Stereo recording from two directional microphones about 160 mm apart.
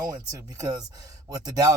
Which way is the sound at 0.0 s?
20° right (ahead or behind).